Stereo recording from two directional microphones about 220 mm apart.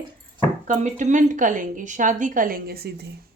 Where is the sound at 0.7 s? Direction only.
35° right (ahead or behind).